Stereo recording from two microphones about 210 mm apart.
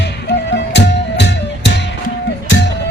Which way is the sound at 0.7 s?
55° left (ahead or behind).